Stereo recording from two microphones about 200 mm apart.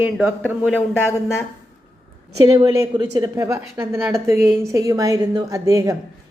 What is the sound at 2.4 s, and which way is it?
A woman's voice, 20° right (ahead or behind).